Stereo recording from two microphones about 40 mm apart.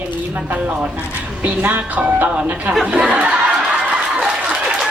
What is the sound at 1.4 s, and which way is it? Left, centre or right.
Speech, right.